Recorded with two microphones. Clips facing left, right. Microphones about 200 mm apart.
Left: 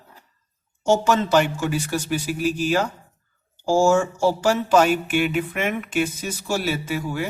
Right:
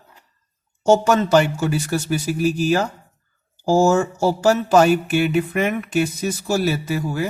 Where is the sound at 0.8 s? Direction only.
40° right (ahead or behind).